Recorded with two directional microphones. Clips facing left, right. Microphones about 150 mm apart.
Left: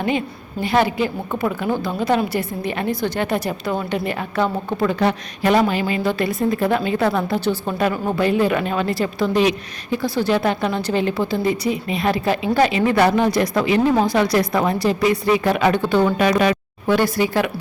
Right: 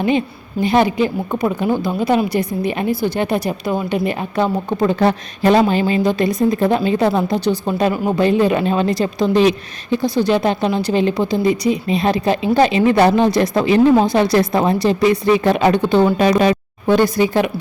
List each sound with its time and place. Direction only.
0.6 s a woman's voice: 20° right (ahead or behind)
4.9 s speech: 30° right (ahead or behind)
6.0 s speech: 20° right (ahead or behind)
10.0 s speech: 20° right (ahead or behind)